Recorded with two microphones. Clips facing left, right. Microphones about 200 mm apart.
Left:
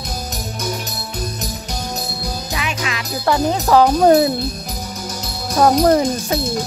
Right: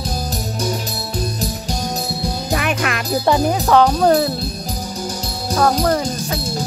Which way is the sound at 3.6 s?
5° left (ahead or behind).